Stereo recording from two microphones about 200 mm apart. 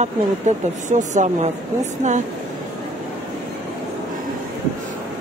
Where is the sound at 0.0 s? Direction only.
35° right (ahead or behind).